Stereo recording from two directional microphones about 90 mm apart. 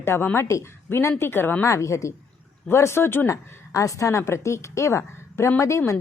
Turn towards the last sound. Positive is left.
turn(degrees=35)  # may be behind; listen again after turning